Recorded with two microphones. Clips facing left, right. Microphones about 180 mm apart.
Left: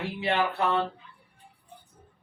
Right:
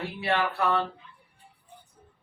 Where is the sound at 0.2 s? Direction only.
20° left (ahead or behind).